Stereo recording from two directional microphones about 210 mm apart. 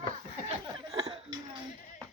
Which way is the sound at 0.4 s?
20° right (ahead or behind).